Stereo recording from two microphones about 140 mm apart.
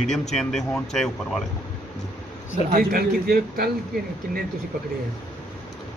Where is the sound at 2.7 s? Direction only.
90° right.